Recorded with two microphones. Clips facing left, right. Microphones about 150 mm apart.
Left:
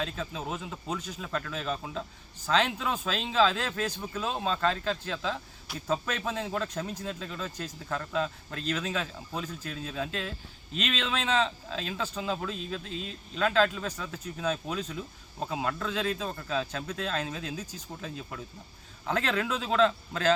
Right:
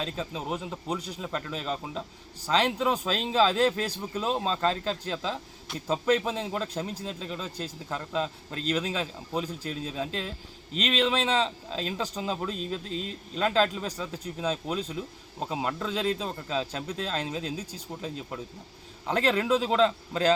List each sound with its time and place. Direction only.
0.0 s speech: 25° right (ahead or behind)
0.7 s speech: 30° right (ahead or behind)